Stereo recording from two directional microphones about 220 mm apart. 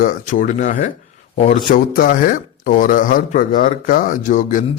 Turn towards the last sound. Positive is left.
turn(degrees=35)  # may be behind; listen again after turning